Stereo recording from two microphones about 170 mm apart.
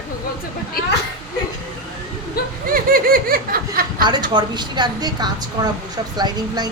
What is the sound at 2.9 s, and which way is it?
Laughter, 60° right (ahead or behind).